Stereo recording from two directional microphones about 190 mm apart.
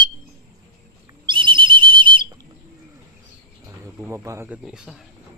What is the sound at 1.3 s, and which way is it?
Whistle, 25° right (ahead or behind).